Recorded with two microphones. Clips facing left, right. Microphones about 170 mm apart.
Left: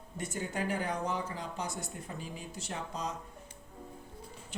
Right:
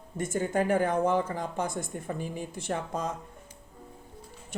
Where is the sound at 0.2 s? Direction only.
50° right (ahead or behind).